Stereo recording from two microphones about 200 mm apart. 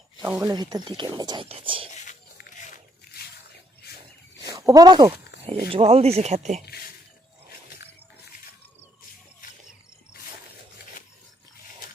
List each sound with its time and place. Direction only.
0.2 s speech: 15° right (ahead or behind)
1.9 s a sound: 40° left (ahead or behind)
4.4 s speech: 15° right (ahead or behind); by 6.6 s 35° right (ahead or behind)